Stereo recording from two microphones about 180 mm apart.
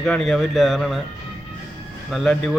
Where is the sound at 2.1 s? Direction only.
Centre (ahead or behind).